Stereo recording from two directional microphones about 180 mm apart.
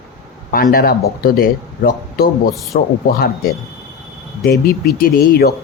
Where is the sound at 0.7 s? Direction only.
55° left (ahead or behind).